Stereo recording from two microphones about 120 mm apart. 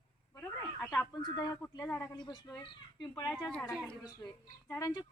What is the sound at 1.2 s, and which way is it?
Speech, 35° left (ahead or behind).